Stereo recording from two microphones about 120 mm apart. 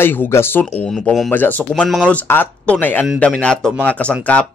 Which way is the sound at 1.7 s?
5° left (ahead or behind).